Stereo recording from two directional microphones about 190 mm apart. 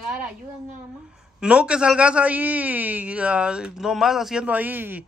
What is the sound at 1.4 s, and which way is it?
A man's voice, 5° right (ahead or behind).